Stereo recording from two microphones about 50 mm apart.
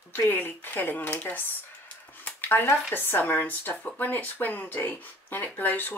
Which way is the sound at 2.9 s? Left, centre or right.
Left.